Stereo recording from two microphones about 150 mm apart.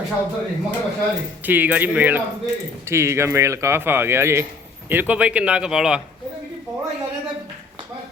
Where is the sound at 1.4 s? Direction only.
10° right (ahead or behind).